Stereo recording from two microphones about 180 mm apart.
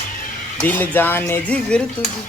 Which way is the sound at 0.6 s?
10° left (ahead or behind).